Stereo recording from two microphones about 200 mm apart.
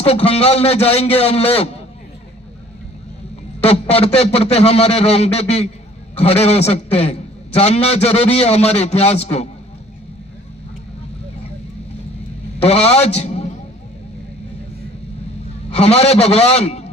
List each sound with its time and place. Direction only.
0.0 s a man's voice: 30° left (ahead or behind)
3.6 s a man's voice: 30° left (ahead or behind)
12.6 s a man's voice: 30° left (ahead or behind)
15.7 s a man's voice: 30° left (ahead or behind)